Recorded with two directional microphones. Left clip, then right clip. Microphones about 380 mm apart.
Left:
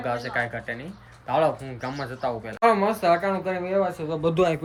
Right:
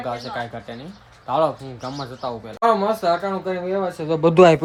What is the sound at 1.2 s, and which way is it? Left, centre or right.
Speech, centre.